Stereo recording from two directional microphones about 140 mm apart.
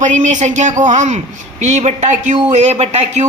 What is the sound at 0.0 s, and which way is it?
A man's voice, 60° right (ahead or behind).